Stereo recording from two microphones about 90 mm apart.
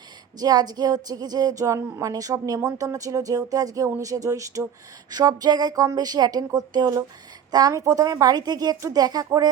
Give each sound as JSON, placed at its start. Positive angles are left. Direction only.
{"t": 0.3, "sound": "a woman's voice", "side_deg": -45}
{"t": 5.1, "sound": "a woman's voice", "side_deg": -50}